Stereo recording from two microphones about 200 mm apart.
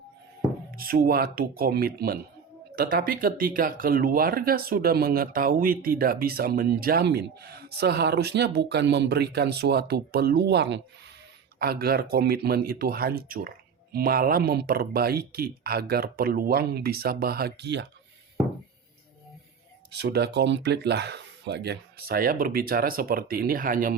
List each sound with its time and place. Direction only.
0.8 s speech: 45° right (ahead or behind)
19.9 s speech: 55° right (ahead or behind)